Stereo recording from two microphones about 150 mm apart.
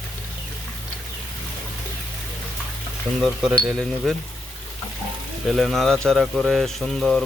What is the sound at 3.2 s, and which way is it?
Speech, centre (ahead or behind).